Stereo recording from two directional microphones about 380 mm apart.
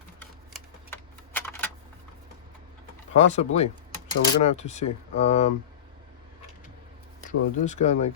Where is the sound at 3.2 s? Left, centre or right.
Centre.